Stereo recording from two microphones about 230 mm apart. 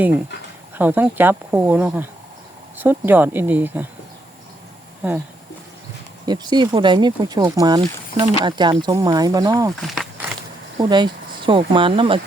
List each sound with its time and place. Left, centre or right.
0.8 s speech: centre
5.0 s speech: centre
6.2 s speech: centre
9.8 s a sound: centre
10.8 s speech: centre